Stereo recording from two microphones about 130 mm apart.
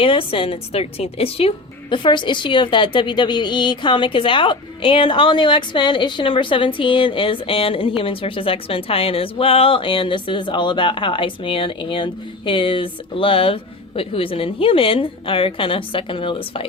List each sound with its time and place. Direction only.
0.0 s speech: 45° left (ahead or behind)